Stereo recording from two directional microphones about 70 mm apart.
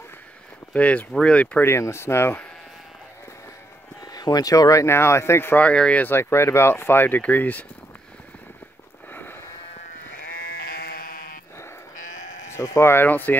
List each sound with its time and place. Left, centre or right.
0.7 s speech: centre
1.6 s speech: left
4.0 s speech: left
4.8 s speech: left
5.6 s speech: centre
6.0 s speech: left
9.1 s sheep: left
12.7 s speech: left